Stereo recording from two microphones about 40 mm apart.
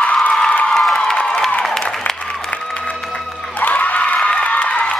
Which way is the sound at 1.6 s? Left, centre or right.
Centre.